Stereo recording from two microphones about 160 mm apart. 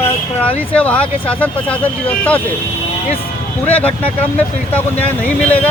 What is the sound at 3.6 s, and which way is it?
Speech, 10° left (ahead or behind).